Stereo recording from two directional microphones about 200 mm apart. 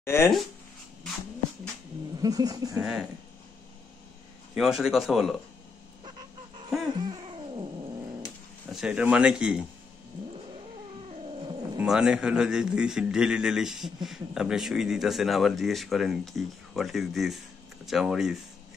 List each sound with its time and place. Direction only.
0.0 s speech: 10° left (ahead or behind)
2.1 s speech: 20° right (ahead or behind)
2.7 s a man's voice: centre (ahead or behind)
4.6 s a man's voice: centre (ahead or behind)
6.9 s babbling: 20° right (ahead or behind)
8.7 s a man's voice: 5° right (ahead or behind)
11.8 s a man's voice: 5° right (ahead or behind)